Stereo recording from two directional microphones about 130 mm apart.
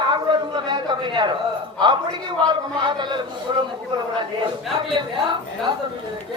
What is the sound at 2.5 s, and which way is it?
A man's voice, 35° right (ahead or behind).